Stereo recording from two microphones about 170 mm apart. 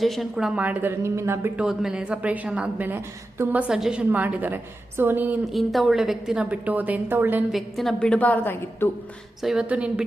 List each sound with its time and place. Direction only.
0.0 s a woman's voice: centre (ahead or behind)
1.6 s a woman's voice: 5° right (ahead or behind)
7.5 s a woman's voice: centre (ahead or behind)
9.4 s a woman's voice: 5° right (ahead or behind)